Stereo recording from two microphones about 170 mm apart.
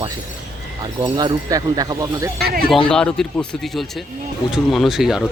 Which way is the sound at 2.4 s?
65° right (ahead or behind).